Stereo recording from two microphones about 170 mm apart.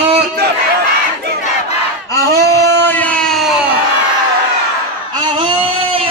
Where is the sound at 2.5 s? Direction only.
15° left (ahead or behind).